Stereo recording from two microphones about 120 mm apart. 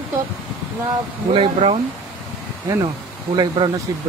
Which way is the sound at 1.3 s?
55° right (ahead or behind).